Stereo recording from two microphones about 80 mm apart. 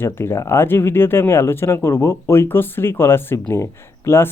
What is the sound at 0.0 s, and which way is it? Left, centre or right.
Speech, left.